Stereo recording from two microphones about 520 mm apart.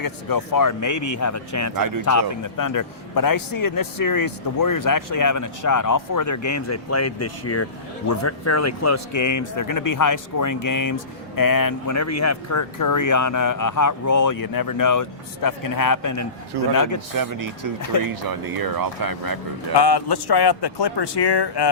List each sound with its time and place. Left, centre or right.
0.0 s a man's voice: left
17.2 s speech: right
19.7 s speech: left